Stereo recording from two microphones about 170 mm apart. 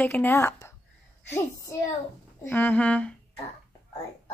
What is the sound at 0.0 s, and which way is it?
Speech, 15° left (ahead or behind).